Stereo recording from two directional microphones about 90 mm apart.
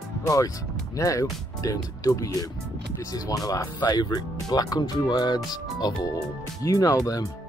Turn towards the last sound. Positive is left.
turn(degrees=40)  # may be behind; listen again after turning